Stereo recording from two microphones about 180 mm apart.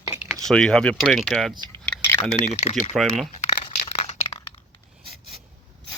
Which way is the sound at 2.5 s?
40° left (ahead or behind).